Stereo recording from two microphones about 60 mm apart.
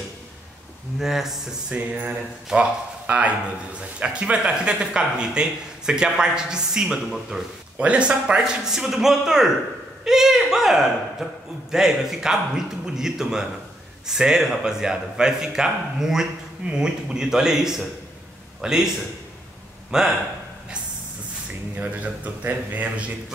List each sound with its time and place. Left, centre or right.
0.9 s speech: centre
1.7 s a man's voice: centre
8.6 s a man's voice: centre
19.9 s a man's voice: centre
21.7 s speech: right